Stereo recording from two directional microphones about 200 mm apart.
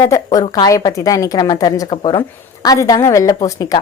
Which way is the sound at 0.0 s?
15° left (ahead or behind).